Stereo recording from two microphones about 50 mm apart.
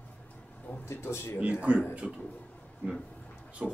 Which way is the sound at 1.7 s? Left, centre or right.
Right.